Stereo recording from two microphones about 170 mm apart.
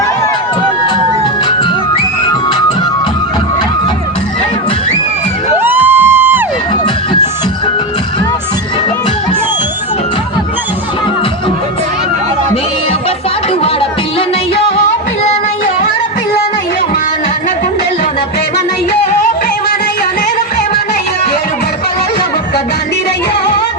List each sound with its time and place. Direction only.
1.5 s music: 30° left (ahead or behind)
5.5 s music: 10° right (ahead or behind)